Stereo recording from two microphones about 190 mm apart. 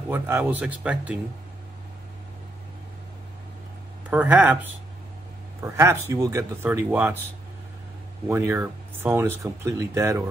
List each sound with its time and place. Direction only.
0.1 s speech: 10° right (ahead or behind)
4.1 s speech: 10° right (ahead or behind)
5.6 s speech: 15° right (ahead or behind)
8.3 s speech: 15° right (ahead or behind)